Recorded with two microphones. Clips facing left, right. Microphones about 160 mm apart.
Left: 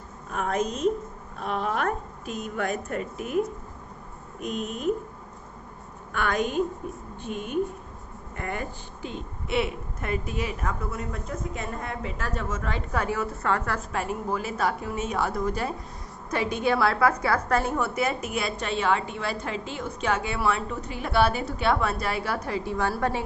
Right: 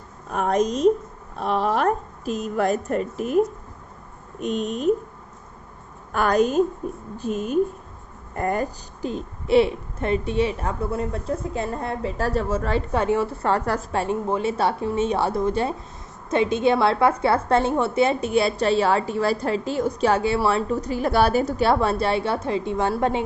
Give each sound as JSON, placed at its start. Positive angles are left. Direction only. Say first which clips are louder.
{"t": 0.3, "sound": "a woman's voice", "louder": "right 6 dB", "side_deg": -35}
{"t": 4.4, "sound": "speech", "louder": "right 6 dB", "side_deg": 5}
{"t": 6.1, "sound": "a woman's voice", "louder": "right 7 dB", "side_deg": -40}